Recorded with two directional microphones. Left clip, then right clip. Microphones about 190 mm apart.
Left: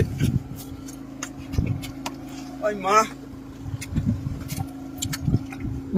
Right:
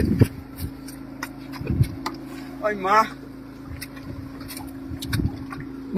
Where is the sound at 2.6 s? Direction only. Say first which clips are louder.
Even; 35° left (ahead or behind).